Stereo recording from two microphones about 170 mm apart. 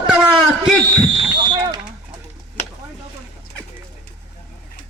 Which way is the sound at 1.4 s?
25° right (ahead or behind).